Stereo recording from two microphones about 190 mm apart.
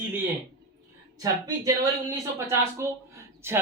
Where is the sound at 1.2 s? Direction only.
20° right (ahead or behind).